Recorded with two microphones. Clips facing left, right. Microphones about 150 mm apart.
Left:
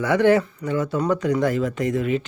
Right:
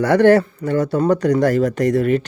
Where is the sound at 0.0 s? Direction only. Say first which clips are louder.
Right 5 dB; 70° right (ahead or behind).